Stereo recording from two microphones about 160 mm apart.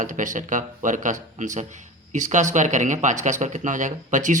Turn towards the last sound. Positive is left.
turn(degrees=-50)  # may be behind; listen again after turning